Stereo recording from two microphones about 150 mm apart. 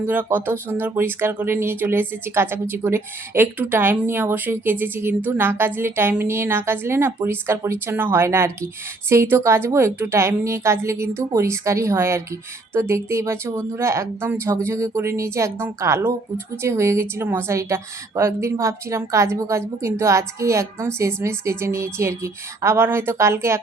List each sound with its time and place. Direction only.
0.0 s a woman's voice: 15° right (ahead or behind)